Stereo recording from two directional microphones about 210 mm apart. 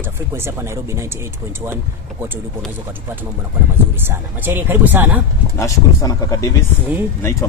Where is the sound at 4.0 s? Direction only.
10° right (ahead or behind).